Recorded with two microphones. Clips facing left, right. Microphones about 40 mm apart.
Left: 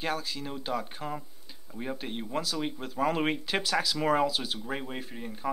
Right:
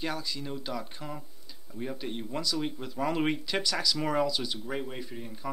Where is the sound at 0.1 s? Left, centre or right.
Left.